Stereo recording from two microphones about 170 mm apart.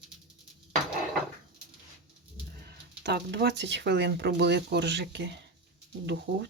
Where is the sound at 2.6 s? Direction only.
85° right.